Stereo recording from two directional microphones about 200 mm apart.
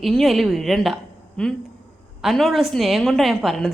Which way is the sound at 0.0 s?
Centre (ahead or behind).